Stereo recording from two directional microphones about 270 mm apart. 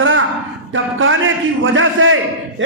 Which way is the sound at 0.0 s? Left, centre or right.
Right.